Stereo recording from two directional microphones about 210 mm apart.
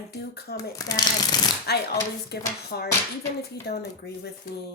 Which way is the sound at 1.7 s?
50° left (ahead or behind).